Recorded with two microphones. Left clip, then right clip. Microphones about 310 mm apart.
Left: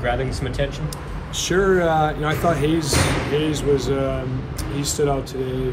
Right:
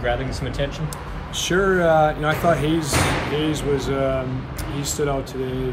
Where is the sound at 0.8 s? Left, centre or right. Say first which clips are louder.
Even; centre.